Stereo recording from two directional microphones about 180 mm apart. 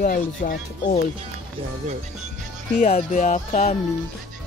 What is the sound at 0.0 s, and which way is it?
Speech, 50° left (ahead or behind).